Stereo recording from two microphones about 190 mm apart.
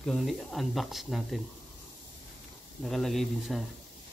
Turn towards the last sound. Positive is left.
turn(degrees=0)  # may be behind; listen again after turning